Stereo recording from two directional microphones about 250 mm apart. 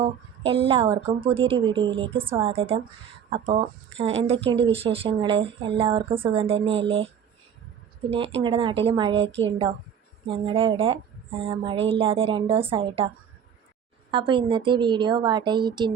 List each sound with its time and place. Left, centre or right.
0.0 s a woman's voice: right
8.4 s a woman's voice: right
14.1 s a woman's voice: centre